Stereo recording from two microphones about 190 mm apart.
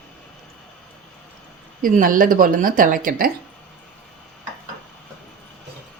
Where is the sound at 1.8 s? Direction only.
45° right (ahead or behind).